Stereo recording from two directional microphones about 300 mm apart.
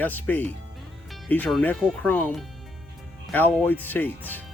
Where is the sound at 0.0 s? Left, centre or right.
Centre.